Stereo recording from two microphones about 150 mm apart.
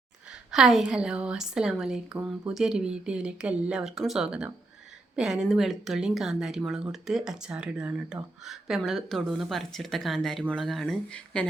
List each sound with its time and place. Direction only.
0.5 s speech: 5° right (ahead or behind)